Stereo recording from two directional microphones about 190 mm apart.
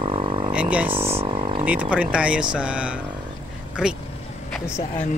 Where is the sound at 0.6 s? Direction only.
5° right (ahead or behind).